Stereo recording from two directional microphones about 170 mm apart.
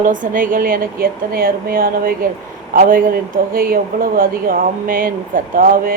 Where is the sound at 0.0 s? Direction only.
50° right (ahead or behind).